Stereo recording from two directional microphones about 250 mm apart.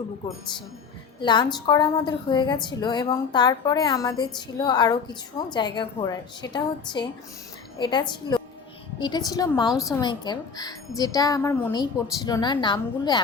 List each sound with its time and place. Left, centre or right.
1.2 s a woman's voice: centre